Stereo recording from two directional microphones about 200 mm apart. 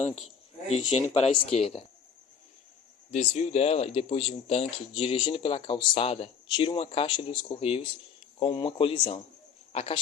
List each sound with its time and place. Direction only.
0.7 s speech: 30° left (ahead or behind)
3.1 s speech: 30° left (ahead or behind)